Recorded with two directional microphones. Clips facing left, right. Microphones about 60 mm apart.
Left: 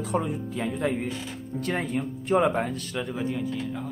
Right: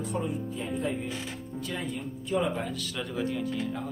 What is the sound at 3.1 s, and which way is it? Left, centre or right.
Speech, centre.